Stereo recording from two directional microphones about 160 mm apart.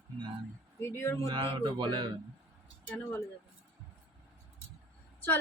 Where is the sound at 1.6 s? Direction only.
30° right (ahead or behind).